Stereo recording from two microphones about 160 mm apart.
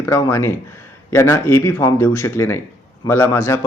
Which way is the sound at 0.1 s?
15° left (ahead or behind).